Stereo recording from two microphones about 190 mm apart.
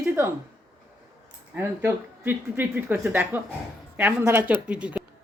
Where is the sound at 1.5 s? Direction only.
15° right (ahead or behind).